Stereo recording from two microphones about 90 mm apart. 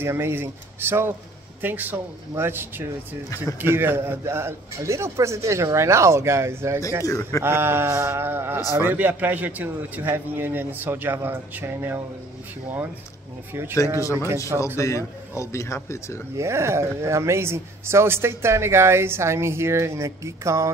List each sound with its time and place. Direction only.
0.0 s a man's voice: 25° right (ahead or behind)
13.5 s a man's voice: 25° right (ahead or behind)
14.8 s speech: 35° left (ahead or behind)
16.3 s a man's voice: 30° right (ahead or behind)